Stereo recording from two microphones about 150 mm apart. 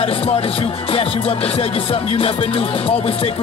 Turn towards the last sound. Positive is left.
turn(degrees=40)  # may be behind; listen again after turning